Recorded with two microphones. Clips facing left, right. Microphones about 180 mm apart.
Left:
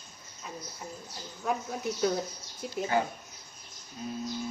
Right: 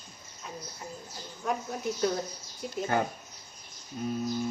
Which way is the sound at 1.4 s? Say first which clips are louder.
Even; centre (ahead or behind).